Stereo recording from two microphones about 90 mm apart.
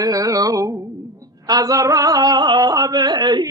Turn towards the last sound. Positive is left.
turn(degrees=-55)  # may be behind; listen again after turning